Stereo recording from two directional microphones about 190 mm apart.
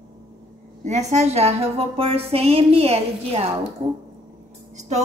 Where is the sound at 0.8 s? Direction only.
35° right (ahead or behind).